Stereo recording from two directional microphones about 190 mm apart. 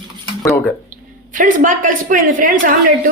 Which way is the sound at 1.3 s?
45° right (ahead or behind).